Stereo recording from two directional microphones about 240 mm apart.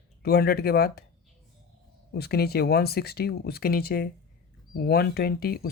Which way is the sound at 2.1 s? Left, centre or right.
Left.